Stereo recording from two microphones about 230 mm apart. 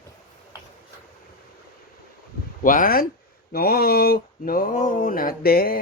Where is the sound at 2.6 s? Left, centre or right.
Left.